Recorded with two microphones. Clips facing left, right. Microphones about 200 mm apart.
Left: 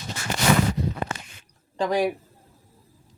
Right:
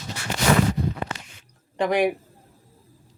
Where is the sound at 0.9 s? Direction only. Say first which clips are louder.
Left 1 dB; 50° left (ahead or behind).